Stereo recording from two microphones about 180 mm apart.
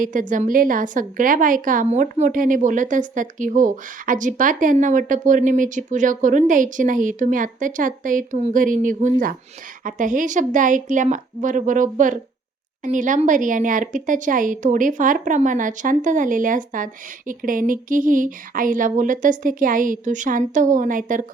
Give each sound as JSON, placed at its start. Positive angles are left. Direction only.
{"t": 0.0, "sound": "a woman's voice", "side_deg": -45}